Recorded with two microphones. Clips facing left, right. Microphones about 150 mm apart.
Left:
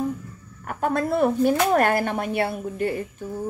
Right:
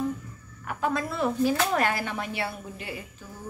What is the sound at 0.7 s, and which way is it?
Speech, 50° left (ahead or behind).